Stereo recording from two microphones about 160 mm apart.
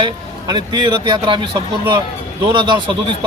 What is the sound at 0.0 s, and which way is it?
Speech, 25° right (ahead or behind).